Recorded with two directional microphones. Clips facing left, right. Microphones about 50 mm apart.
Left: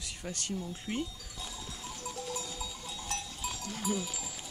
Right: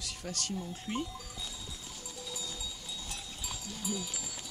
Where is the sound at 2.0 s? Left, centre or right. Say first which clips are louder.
Left 6 dB; left.